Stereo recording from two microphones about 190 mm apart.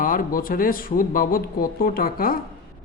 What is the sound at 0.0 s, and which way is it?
A man's voice, 45° left (ahead or behind).